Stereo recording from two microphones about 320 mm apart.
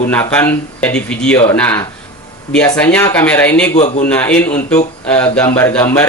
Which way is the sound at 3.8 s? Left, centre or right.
Left.